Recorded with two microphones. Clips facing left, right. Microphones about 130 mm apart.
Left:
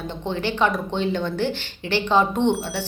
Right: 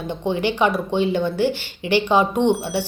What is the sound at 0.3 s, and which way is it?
Speech, 15° right (ahead or behind).